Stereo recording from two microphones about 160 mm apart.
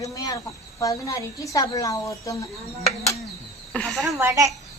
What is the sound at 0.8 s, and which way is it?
A woman's voice, 20° left (ahead or behind).